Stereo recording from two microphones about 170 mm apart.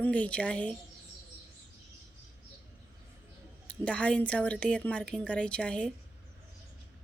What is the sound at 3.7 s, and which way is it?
A woman's voice, 5° left (ahead or behind).